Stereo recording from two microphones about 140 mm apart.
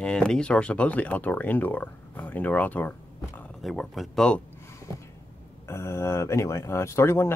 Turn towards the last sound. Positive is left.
turn(degrees=20)  # may be behind; listen again after turning